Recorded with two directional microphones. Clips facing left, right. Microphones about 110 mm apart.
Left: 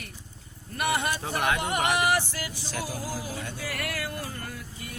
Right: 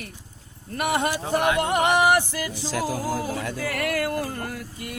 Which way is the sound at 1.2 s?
15° right (ahead or behind).